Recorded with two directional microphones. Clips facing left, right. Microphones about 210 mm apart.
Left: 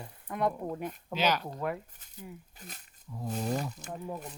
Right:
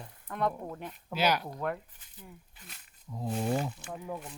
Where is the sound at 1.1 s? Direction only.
10° right (ahead or behind).